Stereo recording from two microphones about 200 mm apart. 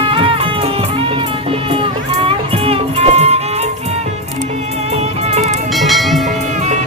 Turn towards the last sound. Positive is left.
turn(degrees=0)  # may be behind; listen again after turning